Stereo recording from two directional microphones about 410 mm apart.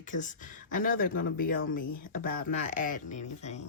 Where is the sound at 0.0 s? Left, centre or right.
Centre.